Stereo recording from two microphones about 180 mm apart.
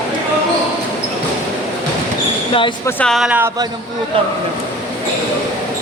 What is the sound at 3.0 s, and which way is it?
Speech, centre (ahead or behind).